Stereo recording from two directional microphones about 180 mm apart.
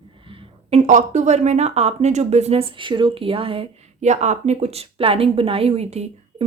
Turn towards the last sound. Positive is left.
turn(degrees=-35)  # may be behind; listen again after turning